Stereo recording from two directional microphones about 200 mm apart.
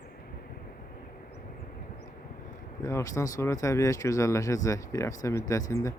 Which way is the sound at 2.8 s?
15° left (ahead or behind).